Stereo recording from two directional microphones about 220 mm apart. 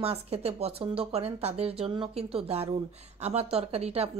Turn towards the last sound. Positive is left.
turn(degrees=-30)  # may be behind; listen again after turning